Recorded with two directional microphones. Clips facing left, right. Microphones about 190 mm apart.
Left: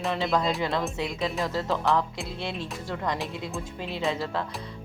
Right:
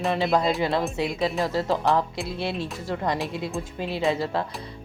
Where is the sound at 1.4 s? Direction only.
35° right (ahead or behind).